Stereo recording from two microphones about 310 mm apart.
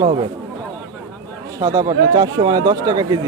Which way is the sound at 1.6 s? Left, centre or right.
Centre.